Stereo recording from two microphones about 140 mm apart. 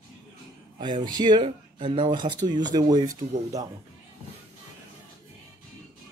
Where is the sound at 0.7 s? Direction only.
35° right (ahead or behind).